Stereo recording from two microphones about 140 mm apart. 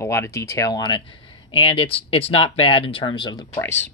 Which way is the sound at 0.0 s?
20° left (ahead or behind).